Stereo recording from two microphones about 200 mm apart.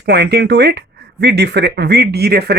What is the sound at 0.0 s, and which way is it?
Speech, 55° right (ahead or behind).